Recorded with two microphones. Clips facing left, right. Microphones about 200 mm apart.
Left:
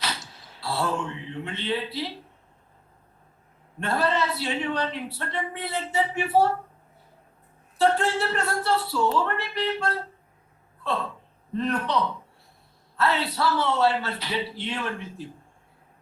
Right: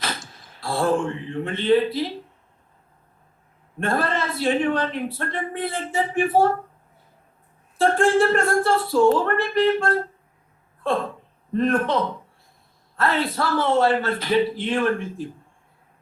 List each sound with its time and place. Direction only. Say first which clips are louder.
0.0 s speech: right 2 dB; 50° right (ahead or behind)
3.8 s a man's voice: right 1 dB; 50° right (ahead or behind)
7.8 s a man's voice: right 5 dB; 50° right (ahead or behind)